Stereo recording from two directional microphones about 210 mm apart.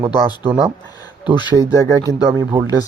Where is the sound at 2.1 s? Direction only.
15° right (ahead or behind).